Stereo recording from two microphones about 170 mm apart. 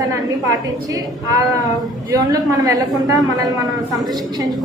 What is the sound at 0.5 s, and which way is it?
A woman's voice, 20° right (ahead or behind).